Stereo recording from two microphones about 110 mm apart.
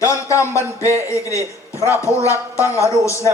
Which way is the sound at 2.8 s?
25° left (ahead or behind).